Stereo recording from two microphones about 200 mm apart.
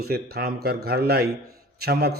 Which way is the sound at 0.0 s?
50° right (ahead or behind).